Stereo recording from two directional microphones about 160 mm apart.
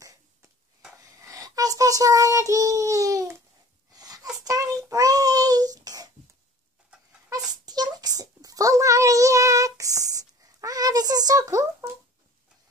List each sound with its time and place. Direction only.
1.2 s child singing: 20° right (ahead or behind)
3.9 s wail: 25° right (ahead or behind)
4.8 s child singing: 20° right (ahead or behind)
7.6 s a sound: 25° right (ahead or behind)